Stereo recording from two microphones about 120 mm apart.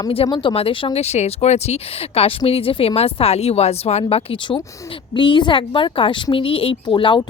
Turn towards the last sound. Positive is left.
turn(degrees=45)  # may be behind; listen again after turning